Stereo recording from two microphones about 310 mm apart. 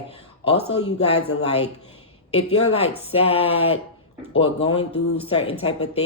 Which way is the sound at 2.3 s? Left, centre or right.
Left.